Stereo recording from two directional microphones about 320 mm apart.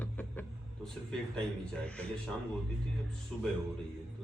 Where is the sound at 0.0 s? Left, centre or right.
Centre.